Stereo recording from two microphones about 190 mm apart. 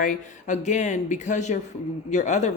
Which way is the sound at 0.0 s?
40° left (ahead or behind).